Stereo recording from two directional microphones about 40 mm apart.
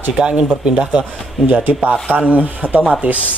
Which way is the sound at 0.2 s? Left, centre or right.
Right.